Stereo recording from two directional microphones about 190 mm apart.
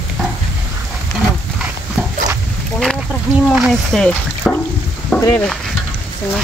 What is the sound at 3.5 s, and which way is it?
Speech, centre (ahead or behind).